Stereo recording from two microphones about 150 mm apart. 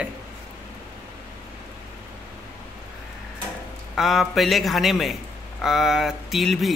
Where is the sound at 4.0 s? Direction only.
Centre (ahead or behind).